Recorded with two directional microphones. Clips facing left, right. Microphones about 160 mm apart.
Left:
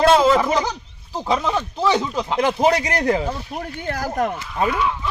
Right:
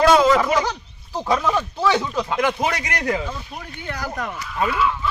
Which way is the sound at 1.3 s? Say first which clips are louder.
Even; 20° left (ahead or behind).